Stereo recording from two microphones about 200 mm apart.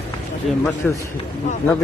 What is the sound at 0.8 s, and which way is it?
Speech, 5° left (ahead or behind).